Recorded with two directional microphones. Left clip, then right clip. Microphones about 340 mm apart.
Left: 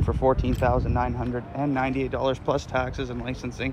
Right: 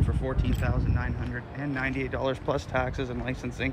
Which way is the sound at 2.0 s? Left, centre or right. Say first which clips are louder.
Left 4 dB; centre.